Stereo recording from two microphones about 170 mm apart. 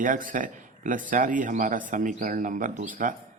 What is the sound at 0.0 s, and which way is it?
A man's voice, 50° right (ahead or behind).